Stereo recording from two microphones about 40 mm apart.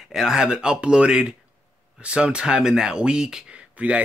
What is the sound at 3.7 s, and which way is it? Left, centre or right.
Speech, right.